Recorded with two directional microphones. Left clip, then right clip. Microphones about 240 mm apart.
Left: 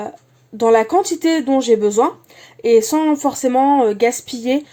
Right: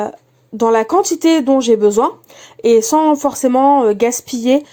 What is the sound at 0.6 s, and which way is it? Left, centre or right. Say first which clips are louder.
Speech: right 1 dB; right.